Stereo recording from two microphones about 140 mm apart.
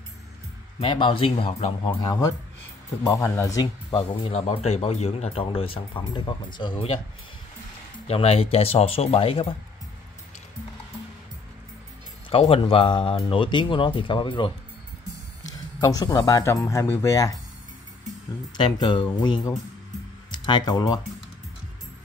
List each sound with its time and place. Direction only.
0.7 s speech: 35° left (ahead or behind)
2.0 s speech: 25° left (ahead or behind)
3.6 s speech: 45° left (ahead or behind)
8.1 s speech: 45° left (ahead or behind)
12.3 s speech: 40° left (ahead or behind)
15.8 s speech: 25° left (ahead or behind)
18.6 s speech: 35° left (ahead or behind)